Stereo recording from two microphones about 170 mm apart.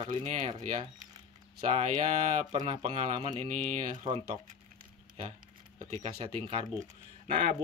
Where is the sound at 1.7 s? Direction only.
35° right (ahead or behind).